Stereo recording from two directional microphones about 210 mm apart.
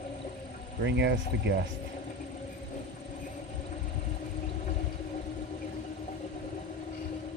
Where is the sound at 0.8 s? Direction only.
55° right (ahead or behind).